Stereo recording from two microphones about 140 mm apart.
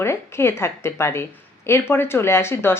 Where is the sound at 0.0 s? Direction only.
20° left (ahead or behind).